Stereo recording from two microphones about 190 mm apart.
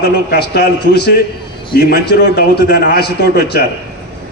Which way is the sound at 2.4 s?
55° left (ahead or behind).